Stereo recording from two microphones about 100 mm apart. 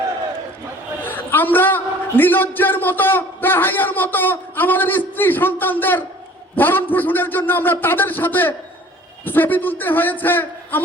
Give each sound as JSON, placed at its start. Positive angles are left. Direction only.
{"t": 1.0, "sound": "a man's voice", "side_deg": 20}